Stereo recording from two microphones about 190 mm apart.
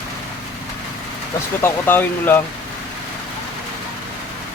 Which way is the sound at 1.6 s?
10° left (ahead or behind).